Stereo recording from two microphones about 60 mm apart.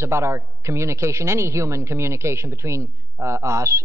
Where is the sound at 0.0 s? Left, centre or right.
Right.